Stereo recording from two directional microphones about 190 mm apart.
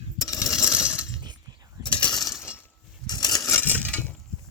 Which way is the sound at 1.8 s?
25° left (ahead or behind).